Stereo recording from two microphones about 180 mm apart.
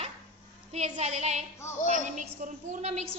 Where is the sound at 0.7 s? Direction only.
40° right (ahead or behind).